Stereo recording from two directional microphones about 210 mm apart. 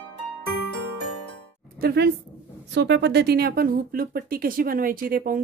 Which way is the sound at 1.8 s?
50° right (ahead or behind).